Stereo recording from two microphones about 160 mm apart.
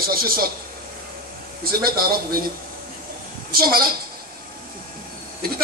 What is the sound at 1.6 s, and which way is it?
Speech, 65° right (ahead or behind).